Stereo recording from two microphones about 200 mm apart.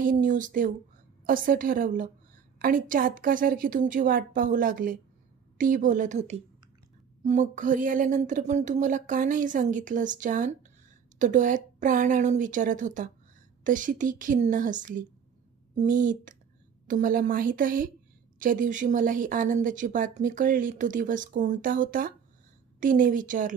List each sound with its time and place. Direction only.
0.1 s a woman's voice: 40° right (ahead or behind)